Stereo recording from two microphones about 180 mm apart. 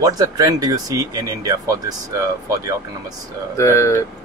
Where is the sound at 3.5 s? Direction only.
15° left (ahead or behind).